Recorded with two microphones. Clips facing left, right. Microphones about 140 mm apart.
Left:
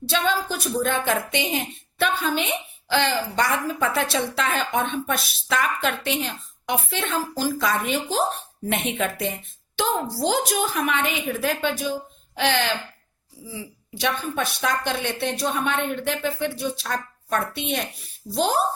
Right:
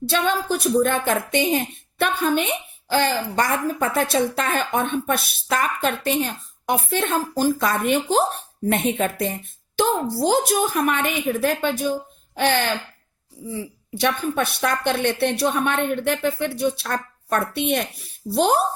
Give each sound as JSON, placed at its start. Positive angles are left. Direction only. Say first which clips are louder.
{"t": 0.1, "sound": "a woman's voice", "louder": "right 2 dB", "side_deg": -55}
{"t": 8.7, "sound": "a woman's voice", "louder": "right 3 dB", "side_deg": -45}
{"t": 14.0, "sound": "speech", "louder": "right 4 dB", "side_deg": -55}